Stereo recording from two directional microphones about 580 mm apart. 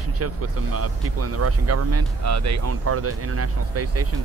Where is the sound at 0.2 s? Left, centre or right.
Right.